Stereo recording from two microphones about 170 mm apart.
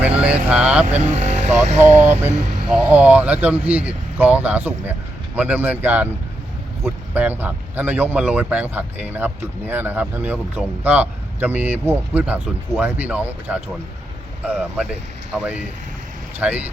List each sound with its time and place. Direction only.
0.0 s speech: 5° right (ahead or behind)
1.1 s speech: 45° right (ahead or behind)
2.6 s speech: 10° right (ahead or behind)
16.4 s speech: 10° right (ahead or behind)